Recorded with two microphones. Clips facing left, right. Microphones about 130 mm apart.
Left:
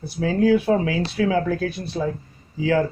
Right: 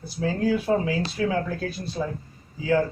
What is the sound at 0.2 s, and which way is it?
Speech, 85° left.